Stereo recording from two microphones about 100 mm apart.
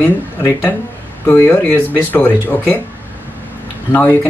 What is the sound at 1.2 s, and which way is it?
Speech, 20° left (ahead or behind).